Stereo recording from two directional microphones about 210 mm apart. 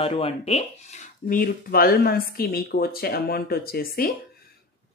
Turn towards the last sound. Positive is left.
turn(degrees=45)  # may be behind; listen again after turning